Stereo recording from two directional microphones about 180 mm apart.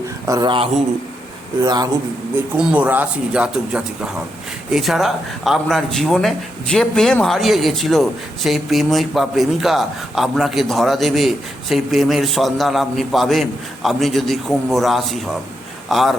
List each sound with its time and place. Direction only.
0.3 s a man's voice: 25° right (ahead or behind)
2.3 s a man's voice: 5° right (ahead or behind)